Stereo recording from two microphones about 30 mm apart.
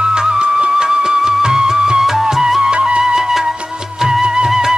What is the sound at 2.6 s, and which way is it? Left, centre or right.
Music, right.